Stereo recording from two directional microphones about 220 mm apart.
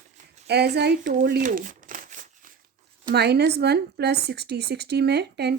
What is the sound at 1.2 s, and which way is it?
Shuffling cards, 40° right (ahead or behind).